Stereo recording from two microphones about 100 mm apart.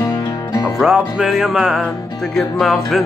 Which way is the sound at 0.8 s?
Centre (ahead or behind).